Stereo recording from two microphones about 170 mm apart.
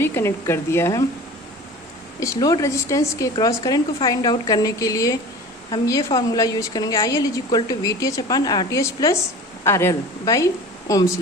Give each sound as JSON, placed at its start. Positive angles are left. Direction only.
{"t": 0.0, "sound": "speech", "side_deg": 15}
{"t": 2.2, "sound": "a woman's voice", "side_deg": 20}